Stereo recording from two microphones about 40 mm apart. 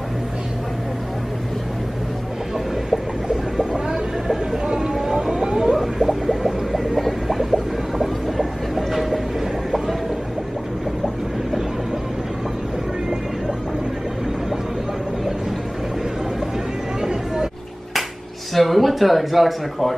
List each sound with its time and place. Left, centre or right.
3.5 s vehicle: centre
17.0 s a sound: centre
18.5 s speech: centre